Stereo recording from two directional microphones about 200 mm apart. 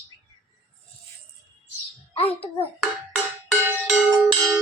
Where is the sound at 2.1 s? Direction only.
30° left (ahead or behind).